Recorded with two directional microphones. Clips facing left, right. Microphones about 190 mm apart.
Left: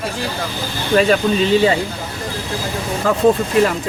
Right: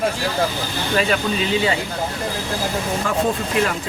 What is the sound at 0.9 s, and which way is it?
Speech, 40° left (ahead or behind).